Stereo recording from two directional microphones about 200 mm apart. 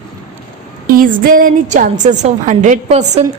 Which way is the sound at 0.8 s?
45° right (ahead or behind).